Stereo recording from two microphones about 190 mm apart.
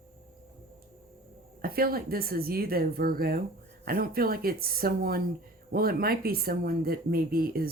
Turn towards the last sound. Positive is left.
turn(degrees=-50)  # may be behind; listen again after turning